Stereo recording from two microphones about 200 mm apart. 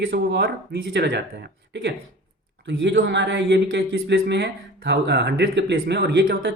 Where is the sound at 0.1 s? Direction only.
55° right (ahead or behind).